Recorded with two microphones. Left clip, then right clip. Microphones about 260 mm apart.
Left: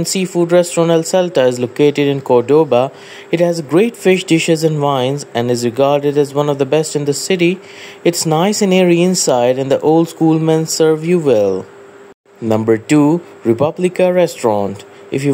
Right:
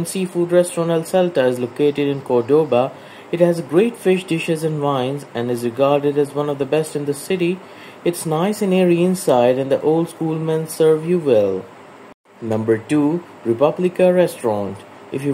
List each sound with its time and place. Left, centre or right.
0.0 s speech: left